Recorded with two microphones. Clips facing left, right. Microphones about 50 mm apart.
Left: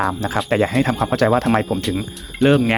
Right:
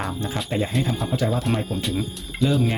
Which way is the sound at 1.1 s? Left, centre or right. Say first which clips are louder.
Left 9 dB; left.